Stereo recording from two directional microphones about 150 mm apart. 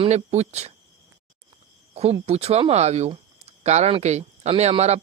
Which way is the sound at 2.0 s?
45° right (ahead or behind).